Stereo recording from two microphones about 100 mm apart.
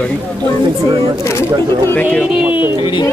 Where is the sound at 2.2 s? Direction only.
15° right (ahead or behind).